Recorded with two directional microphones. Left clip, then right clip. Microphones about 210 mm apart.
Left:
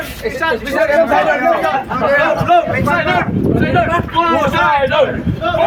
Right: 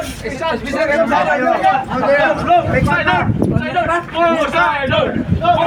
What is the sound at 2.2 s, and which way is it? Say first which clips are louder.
Speech: left 2 dB; 50° left (ahead or behind).